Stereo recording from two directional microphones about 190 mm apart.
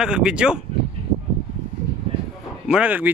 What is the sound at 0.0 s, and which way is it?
Speech, 5° right (ahead or behind).